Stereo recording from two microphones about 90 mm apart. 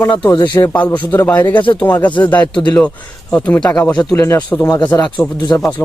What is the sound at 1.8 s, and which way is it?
A man's voice, 20° left (ahead or behind).